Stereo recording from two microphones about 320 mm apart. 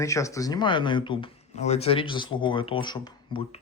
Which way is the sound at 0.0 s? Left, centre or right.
Centre.